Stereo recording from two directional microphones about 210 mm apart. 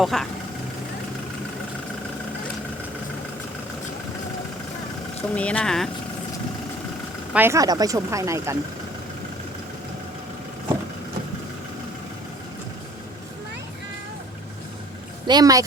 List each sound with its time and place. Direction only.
0.0 s speech: centre (ahead or behind)
5.3 s speech: 5° left (ahead or behind)
7.3 s speech: 10° right (ahead or behind)
15.3 s speech: 20° right (ahead or behind)